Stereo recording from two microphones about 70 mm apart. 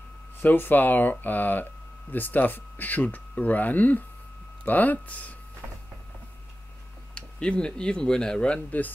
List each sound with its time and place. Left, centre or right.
0.4 s speech: left
7.2 s speech: centre
8.6 s speech: left